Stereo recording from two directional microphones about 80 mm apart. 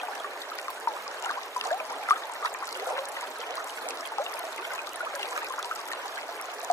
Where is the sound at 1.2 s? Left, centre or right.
Left.